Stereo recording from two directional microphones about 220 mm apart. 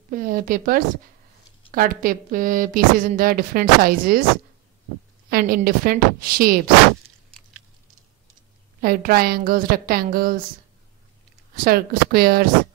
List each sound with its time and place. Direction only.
0.1 s speech: 40° right (ahead or behind)
5.3 s speech: 40° right (ahead or behind)
8.8 s speech: 40° right (ahead or behind)
11.5 s speech: 40° right (ahead or behind)